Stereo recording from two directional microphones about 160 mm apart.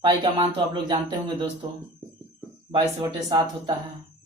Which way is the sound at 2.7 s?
30° right (ahead or behind).